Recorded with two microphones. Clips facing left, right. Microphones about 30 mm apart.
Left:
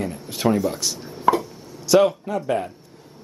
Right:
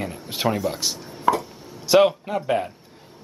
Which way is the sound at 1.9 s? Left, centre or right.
Right.